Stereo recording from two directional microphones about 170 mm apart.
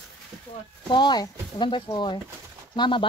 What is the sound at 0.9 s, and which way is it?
Speech, 25° left (ahead or behind).